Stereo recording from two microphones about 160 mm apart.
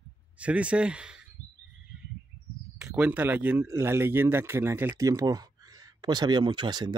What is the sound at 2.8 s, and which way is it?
Speech, 5° right (ahead or behind).